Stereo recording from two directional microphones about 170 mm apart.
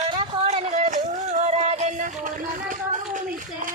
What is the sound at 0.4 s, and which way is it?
Music, 45° right (ahead or behind).